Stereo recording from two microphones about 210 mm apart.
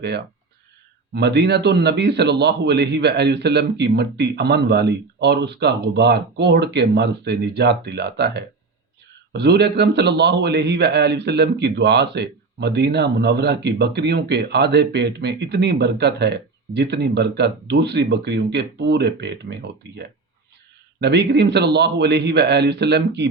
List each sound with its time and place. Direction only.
1.1 s a man's voice: 55° right (ahead or behind)